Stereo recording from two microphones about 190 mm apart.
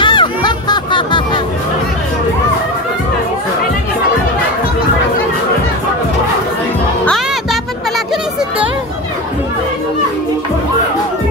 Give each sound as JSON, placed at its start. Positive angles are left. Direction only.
{"t": 0.0, "sound": "music", "side_deg": 25}